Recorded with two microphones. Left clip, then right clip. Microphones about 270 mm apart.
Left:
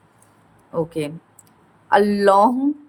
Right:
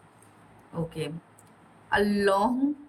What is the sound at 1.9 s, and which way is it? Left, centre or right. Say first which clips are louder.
Speech: left 10 dB; centre.